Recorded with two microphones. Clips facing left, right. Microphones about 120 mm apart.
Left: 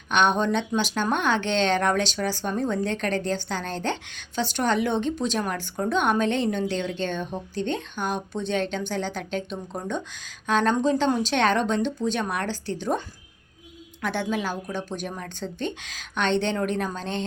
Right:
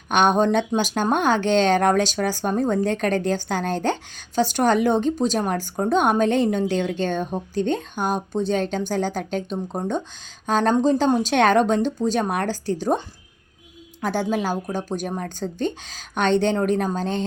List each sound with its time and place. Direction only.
0.1 s a woman's voice: 45° right (ahead or behind)
14.0 s speech: 40° right (ahead or behind)